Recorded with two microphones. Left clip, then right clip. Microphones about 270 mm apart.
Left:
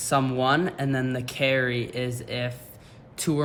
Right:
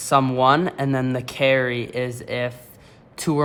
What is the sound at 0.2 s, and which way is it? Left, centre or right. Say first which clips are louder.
Speech: right 7 dB; centre.